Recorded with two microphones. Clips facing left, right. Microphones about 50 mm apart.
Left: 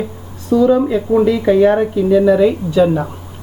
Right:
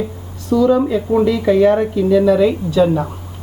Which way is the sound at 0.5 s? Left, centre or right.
Centre.